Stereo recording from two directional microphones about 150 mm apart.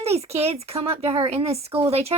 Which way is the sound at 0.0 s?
45° right (ahead or behind).